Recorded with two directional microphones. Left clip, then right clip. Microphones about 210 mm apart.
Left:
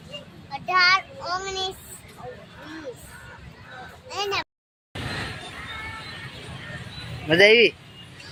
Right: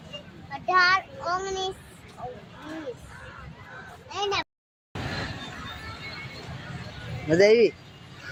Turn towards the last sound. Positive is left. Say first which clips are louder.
# left 3 dB
turn(degrees=-10)  # may be behind; listen again after turning